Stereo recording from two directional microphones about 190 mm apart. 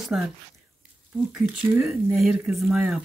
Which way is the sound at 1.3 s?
5° right (ahead or behind).